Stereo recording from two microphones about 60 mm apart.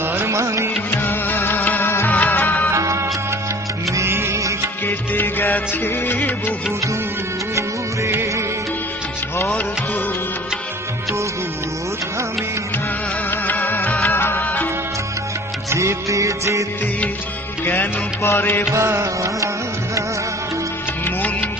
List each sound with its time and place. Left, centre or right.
0.0 s music: right
0.3 s music: right
0.9 s music: left
2.7 s music: right
4.9 s music: left
8.0 s music: right
13.3 s music of bollywood: left
14.4 s music: left
15.7 s music of bollywood: right
18.2 s music: left
18.7 s music: right
21.0 s music: left